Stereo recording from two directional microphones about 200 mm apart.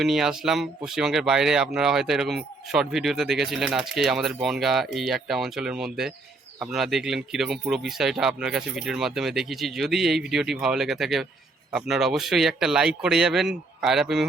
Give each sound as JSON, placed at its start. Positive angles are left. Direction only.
{"t": 0.0, "sound": "speech", "side_deg": 0}